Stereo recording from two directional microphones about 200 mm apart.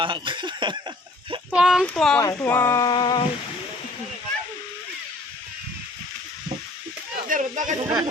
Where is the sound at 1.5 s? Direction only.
5° right (ahead or behind); by 3.2 s 20° left (ahead or behind).